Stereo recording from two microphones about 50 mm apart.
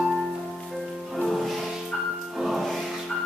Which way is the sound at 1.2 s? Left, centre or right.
Centre.